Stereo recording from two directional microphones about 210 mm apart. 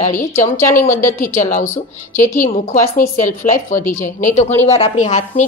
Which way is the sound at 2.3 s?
40° left (ahead or behind).